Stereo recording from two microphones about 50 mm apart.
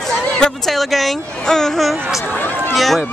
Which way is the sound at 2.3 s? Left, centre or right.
Left.